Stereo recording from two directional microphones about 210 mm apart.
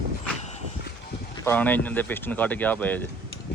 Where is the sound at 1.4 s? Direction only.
10° left (ahead or behind).